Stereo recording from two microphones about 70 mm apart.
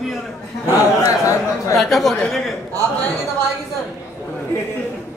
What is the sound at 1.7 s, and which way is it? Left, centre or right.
Speech, centre.